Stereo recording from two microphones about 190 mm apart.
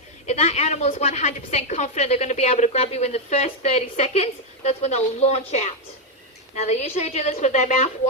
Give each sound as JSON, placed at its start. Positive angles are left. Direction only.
{"t": 0.3, "sound": "a woman's voice", "side_deg": 35}